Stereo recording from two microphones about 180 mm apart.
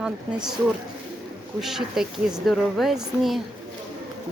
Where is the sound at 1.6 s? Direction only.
Centre (ahead or behind).